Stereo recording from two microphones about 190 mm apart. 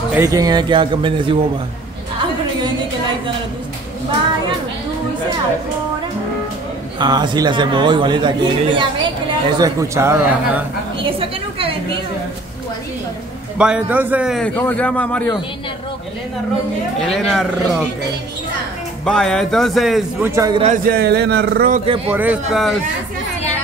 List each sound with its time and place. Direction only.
0.1 s a man's voice: 15° right (ahead or behind)
7.0 s a man's voice: 20° right (ahead or behind)
11.0 s a sound: 30° right (ahead or behind)
13.6 s a man's voice: 5° right (ahead or behind)
14.5 s a man's voice: 10° left (ahead or behind)
17.1 s a man's voice: centre (ahead or behind)
19.0 s a man's voice: centre (ahead or behind)
20.2 s a man's voice: 20° right (ahead or behind)
20.6 s speech: 45° right (ahead or behind)
21.8 s a man's voice: 30° right (ahead or behind)
22.1 s a man's voice: 10° right (ahead or behind)